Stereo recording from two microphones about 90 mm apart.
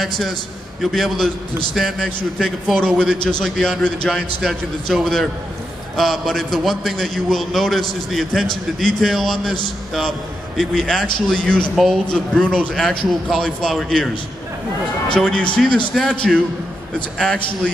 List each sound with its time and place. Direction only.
0.9 s a man's voice: centre (ahead or behind)
11.7 s a man's voice: centre (ahead or behind)
15.1 s a man's voice: 10° left (ahead or behind)
16.2 s a man's voice: 10° left (ahead or behind)